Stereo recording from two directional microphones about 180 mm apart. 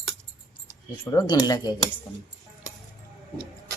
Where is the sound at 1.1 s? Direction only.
20° left (ahead or behind).